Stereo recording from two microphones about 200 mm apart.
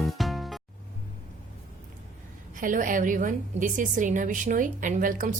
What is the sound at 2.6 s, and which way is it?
A woman's voice, 40° right (ahead or behind).